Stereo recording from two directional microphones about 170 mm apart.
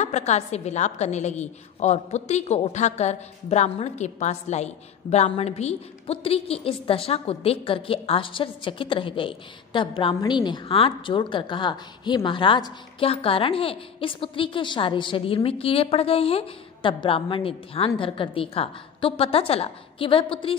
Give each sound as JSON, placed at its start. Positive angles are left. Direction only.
{"t": 0.0, "sound": "a woman's voice", "side_deg": 40}